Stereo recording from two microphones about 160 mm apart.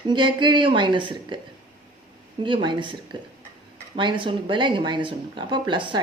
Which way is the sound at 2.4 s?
30° right (ahead or behind).